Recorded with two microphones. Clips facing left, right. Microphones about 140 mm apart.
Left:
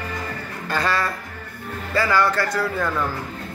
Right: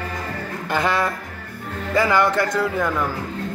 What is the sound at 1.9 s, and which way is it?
A man's voice, 20° right (ahead or behind).